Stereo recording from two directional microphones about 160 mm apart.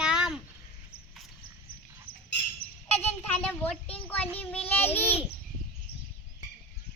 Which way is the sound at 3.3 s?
10° left (ahead or behind).